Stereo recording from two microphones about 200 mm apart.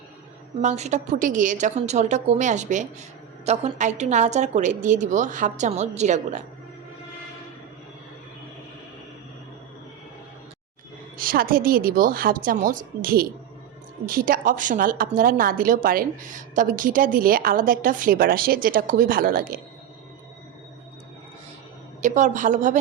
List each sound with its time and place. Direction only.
0.6 s a woman's voice: 35° right (ahead or behind)
11.2 s a woman's voice: 45° right (ahead or behind)
22.0 s a woman's voice: 35° right (ahead or behind)